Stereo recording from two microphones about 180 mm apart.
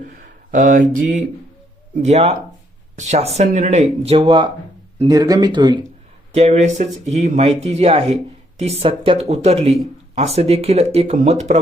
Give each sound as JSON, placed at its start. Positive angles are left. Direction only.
{"t": 0.2, "sound": "speech", "side_deg": -45}
{"t": 6.3, "sound": "speech", "side_deg": -40}